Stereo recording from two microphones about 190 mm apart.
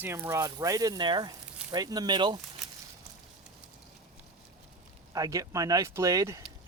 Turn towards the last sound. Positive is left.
turn(degrees=-15)  # may be behind; listen again after turning